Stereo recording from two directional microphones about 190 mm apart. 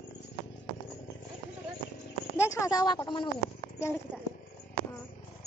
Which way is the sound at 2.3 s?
15° left (ahead or behind).